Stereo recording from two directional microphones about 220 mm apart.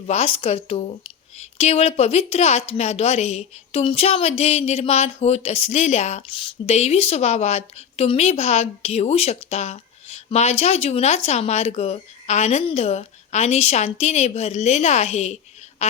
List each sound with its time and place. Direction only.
0.1 s a woman's voice: 25° left (ahead or behind)